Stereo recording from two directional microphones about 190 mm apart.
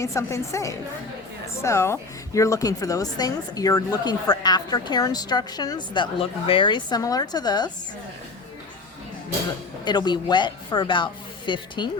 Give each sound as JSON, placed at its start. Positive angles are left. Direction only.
{"t": 0.0, "sound": "a woman's voice", "side_deg": 15}
{"t": 9.8, "sound": "a woman's voice", "side_deg": 25}